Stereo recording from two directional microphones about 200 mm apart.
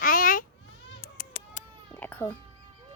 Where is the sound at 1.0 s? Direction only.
45° left (ahead or behind).